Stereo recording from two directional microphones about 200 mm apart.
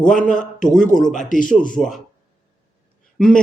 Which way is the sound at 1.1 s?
40° left (ahead or behind).